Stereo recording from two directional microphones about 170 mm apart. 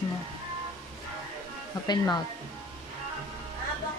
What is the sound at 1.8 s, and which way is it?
Speech, 25° left (ahead or behind).